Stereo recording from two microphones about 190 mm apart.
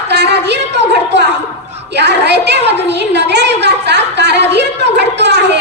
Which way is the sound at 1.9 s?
60° right (ahead or behind).